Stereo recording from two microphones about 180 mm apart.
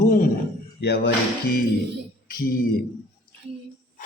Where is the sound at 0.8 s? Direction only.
70° left (ahead or behind).